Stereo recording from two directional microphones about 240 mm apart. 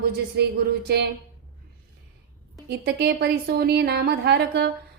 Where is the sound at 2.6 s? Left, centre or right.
Right.